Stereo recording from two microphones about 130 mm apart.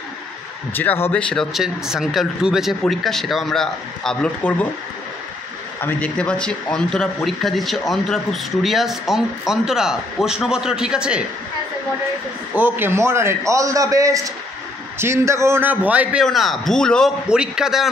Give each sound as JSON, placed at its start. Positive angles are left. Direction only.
{"t": 0.7, "sound": "speech", "side_deg": 15}
{"t": 1.1, "sound": "a man's voice", "side_deg": 5}
{"t": 5.8, "sound": "a man's voice", "side_deg": 15}
{"t": 12.5, "sound": "a man's voice", "side_deg": -15}
{"t": 16.3, "sound": "a man's voice", "side_deg": 0}
{"t": 17.3, "sound": "a man's voice", "side_deg": -5}